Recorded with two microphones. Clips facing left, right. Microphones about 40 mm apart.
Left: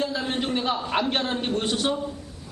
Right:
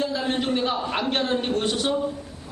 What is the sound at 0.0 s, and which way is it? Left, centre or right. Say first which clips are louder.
A man's voice: right 2 dB; centre.